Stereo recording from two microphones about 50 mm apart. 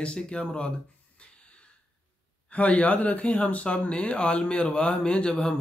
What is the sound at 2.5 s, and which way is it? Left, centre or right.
Speech, left.